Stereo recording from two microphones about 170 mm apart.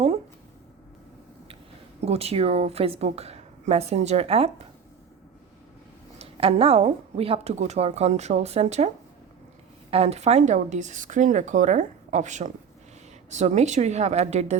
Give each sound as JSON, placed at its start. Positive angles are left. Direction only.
{"t": 2.0, "sound": "a woman's voice", "side_deg": -35}
{"t": 6.1, "sound": "a woman's voice", "side_deg": -35}
{"t": 9.9, "sound": "a woman's voice", "side_deg": -35}